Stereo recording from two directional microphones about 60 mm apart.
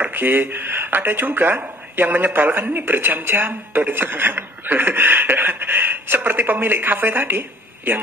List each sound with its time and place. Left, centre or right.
0.0 s speech: right